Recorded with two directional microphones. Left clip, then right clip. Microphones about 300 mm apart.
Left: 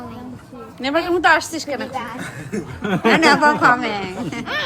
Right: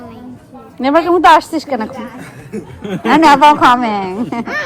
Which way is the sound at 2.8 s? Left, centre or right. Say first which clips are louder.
Left 2 dB; left.